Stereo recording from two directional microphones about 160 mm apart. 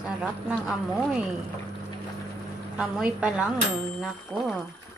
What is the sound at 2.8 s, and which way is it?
A woman's voice, 5° right (ahead or behind).